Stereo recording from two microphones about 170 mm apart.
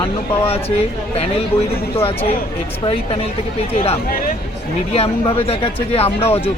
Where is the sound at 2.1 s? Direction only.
35° left (ahead or behind).